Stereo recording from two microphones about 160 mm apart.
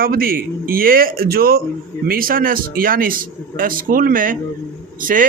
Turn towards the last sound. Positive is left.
turn(degrees=-60)  # may be behind; listen again after turning